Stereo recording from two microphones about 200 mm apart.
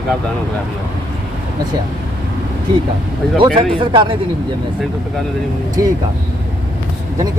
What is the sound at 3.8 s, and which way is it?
Speech, 25° right (ahead or behind).